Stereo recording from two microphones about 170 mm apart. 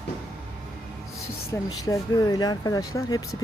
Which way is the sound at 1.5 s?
20° left (ahead or behind).